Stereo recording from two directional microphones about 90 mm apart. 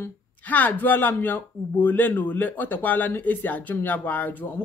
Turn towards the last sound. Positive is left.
turn(degrees=20)  # may be behind; listen again after turning